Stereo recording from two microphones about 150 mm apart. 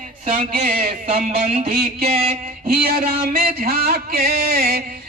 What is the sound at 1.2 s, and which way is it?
Music, 50° right (ahead or behind).